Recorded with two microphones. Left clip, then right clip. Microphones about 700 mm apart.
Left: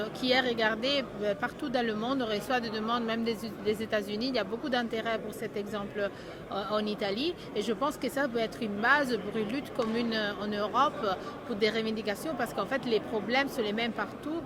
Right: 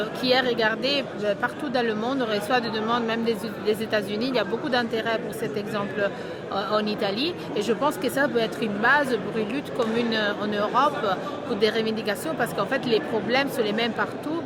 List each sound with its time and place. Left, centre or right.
0.2 s speech: left